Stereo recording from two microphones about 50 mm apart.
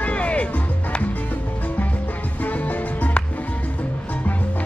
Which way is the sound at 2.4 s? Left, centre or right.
Left.